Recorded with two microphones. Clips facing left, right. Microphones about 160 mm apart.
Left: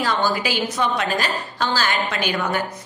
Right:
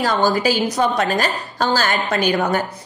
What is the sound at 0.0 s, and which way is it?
A woman's voice, 40° right (ahead or behind).